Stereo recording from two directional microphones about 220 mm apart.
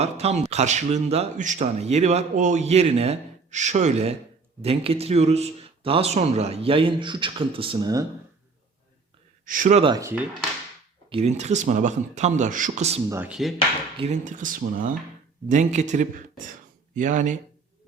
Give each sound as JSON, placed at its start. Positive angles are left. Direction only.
{"t": 0.0, "sound": "speech", "side_deg": -30}
{"t": 9.5, "sound": "speech", "side_deg": -35}
{"t": 11.1, "sound": "speech", "side_deg": -30}
{"t": 13.1, "sound": "speech", "side_deg": -10}
{"t": 14.0, "sound": "speech", "side_deg": -35}